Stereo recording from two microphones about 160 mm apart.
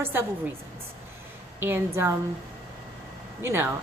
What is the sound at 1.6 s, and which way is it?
Speech, 15° right (ahead or behind).